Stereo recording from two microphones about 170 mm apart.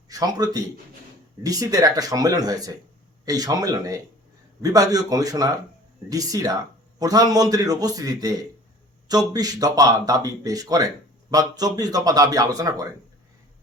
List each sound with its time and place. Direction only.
0.1 s a man's voice: 20° right (ahead or behind)